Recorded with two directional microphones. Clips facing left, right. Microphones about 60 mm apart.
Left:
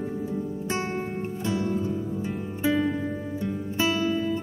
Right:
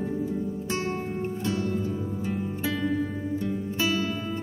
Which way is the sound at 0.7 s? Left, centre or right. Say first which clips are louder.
Left 1 dB; left.